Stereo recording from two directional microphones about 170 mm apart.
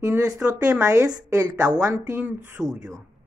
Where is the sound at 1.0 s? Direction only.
20° right (ahead or behind).